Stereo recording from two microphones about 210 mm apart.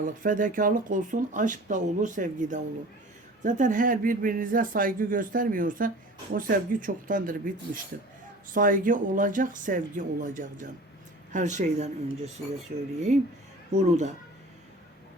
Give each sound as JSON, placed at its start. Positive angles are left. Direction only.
{"t": 0.0, "sound": "speech", "side_deg": -40}
{"t": 12.7, "sound": "speech", "side_deg": -45}
{"t": 13.7, "sound": "speech", "side_deg": -30}